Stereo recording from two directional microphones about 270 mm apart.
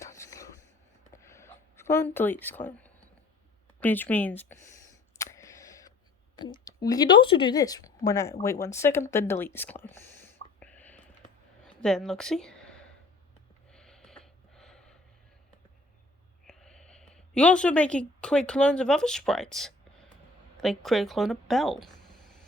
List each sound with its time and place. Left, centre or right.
0.0 s a sound: centre
3.8 s speech: centre
5.1 s camera: centre
6.7 s speech: centre
10.6 s whispering: centre
11.6 s a sound: centre
13.7 s snort: centre
16.5 s a sound: centre
17.2 s speech: centre